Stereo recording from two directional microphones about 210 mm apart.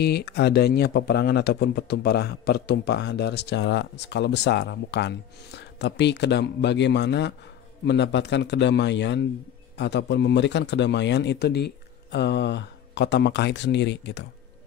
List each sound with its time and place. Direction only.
0.0 s a man's voice: 50° left (ahead or behind)